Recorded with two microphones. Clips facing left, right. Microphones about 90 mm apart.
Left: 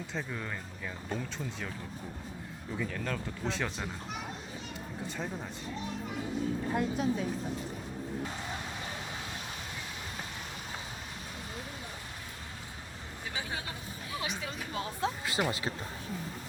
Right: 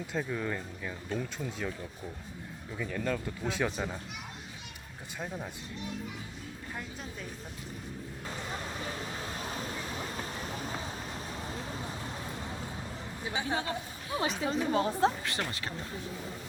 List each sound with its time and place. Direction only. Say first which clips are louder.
0.1 s speech: right 6 dB; 5° right (ahead or behind)
2.7 s speech: right 2 dB; 5° right (ahead or behind)
6.7 s speech: left 12 dB; 5° left (ahead or behind)
13.3 s speech: right 7 dB; 30° right (ahead or behind)
15.3 s speech: left 4 dB; 15° left (ahead or behind)